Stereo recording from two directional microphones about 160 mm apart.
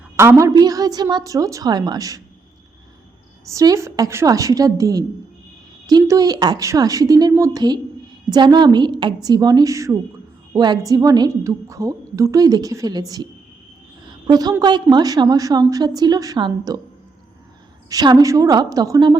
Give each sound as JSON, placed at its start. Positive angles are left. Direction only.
{"t": 0.2, "sound": "a woman's voice", "side_deg": -15}
{"t": 3.5, "sound": "a woman's voice", "side_deg": -20}
{"t": 14.3, "sound": "a woman's voice", "side_deg": -25}
{"t": 17.8, "sound": "a woman's voice", "side_deg": -25}